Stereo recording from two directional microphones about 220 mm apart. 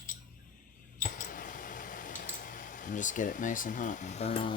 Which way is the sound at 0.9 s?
35° left (ahead or behind).